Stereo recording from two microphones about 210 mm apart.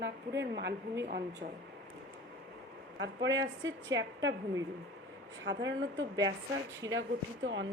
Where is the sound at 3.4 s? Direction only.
60° right (ahead or behind).